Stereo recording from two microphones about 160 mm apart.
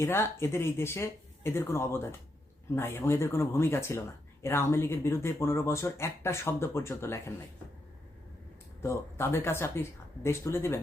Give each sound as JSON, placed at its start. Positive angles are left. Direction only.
{"t": 0.0, "sound": "speech", "side_deg": 15}
{"t": 8.8, "sound": "speech", "side_deg": 15}